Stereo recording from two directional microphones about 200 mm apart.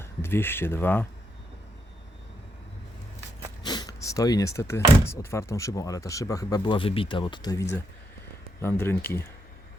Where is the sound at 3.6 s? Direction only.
20° left (ahead or behind).